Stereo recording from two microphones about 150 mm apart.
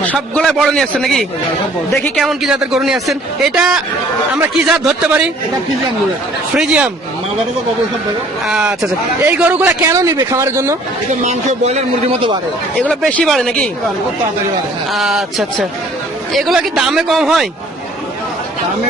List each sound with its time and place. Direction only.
0.0 s a man's voice: 10° left (ahead or behind)
6.5 s a man's voice: 5° right (ahead or behind)
8.4 s a man's voice: 5° right (ahead or behind)
11.2 s speech: 45° right (ahead or behind)
12.8 s speech: 5° left (ahead or behind)
14.9 s a man's voice: centre (ahead or behind)